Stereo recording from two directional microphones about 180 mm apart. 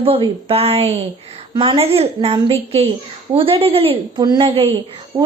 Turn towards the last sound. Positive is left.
turn(degrees=-15)  # may be behind; listen again after turning